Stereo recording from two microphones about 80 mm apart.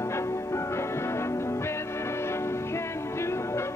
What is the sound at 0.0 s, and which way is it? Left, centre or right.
Music, left.